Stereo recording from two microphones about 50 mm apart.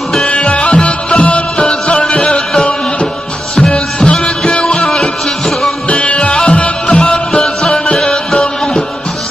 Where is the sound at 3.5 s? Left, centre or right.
Centre.